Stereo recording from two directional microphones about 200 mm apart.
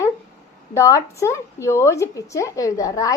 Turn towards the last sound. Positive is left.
turn(degrees=15)  # may be behind; listen again after turning